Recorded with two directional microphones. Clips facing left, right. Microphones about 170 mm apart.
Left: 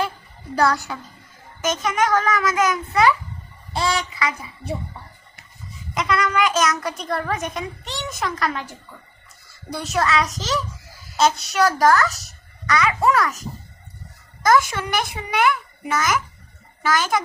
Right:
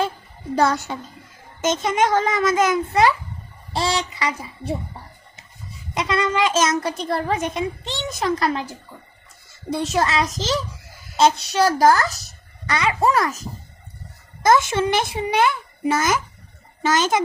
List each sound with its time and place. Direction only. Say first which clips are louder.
0.5 s a child's voice: right 1 dB; 20° right (ahead or behind)
6.0 s a child's voice: even; 25° right (ahead or behind)
14.4 s a child's voice: right 2 dB; 25° right (ahead or behind)